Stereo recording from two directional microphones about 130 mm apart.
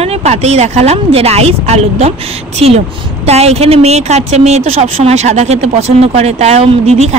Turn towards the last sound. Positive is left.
turn(degrees=-55)  # may be behind; listen again after turning